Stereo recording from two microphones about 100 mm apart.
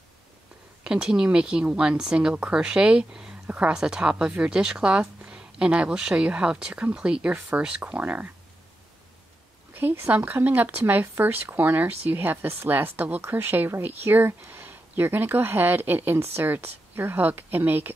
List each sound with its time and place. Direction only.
0.8 s speech: 5° right (ahead or behind)
9.8 s speech: 20° right (ahead or behind)